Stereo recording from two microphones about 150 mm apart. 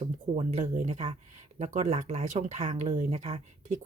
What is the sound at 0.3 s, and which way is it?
Speech, 45° right (ahead or behind).